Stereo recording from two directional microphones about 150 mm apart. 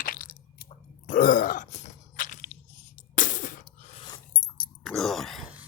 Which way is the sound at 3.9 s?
35° left (ahead or behind).